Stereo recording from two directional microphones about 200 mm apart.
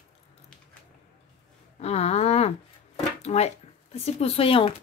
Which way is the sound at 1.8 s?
30° left (ahead or behind).